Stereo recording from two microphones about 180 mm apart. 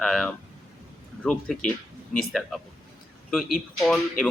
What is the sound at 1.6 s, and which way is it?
Speech, 45° left (ahead or behind).